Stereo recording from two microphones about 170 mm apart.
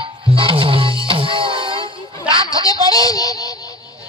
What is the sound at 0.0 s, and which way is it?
Music, 30° right (ahead or behind).